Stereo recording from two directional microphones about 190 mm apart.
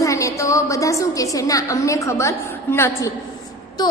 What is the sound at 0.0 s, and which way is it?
A woman's voice, 15° left (ahead or behind).